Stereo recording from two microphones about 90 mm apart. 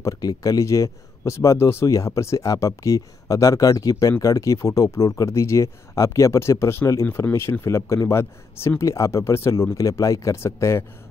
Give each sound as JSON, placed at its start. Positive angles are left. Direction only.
{"t": 0.0, "sound": "speech", "side_deg": 45}